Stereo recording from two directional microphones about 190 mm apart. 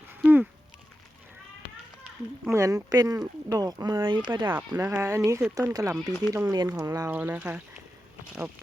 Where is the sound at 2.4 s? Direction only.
15° right (ahead or behind).